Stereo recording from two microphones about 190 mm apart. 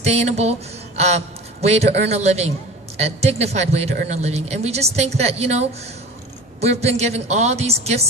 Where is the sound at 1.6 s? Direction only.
35° right (ahead or behind).